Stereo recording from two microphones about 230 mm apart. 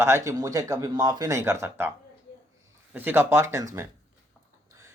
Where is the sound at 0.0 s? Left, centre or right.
Centre.